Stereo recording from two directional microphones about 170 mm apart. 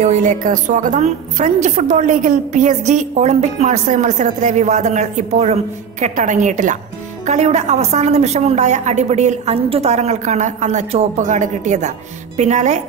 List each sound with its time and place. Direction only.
0.0 s a woman's voice: 45° right (ahead or behind)